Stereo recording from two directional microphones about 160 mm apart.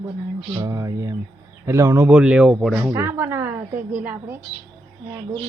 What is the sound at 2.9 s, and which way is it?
A woman's voice, 15° right (ahead or behind).